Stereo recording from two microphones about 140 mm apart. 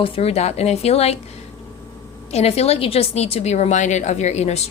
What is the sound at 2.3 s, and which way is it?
Speech, 50° left (ahead or behind).